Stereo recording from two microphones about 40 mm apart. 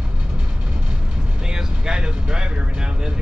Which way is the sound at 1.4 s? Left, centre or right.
Centre.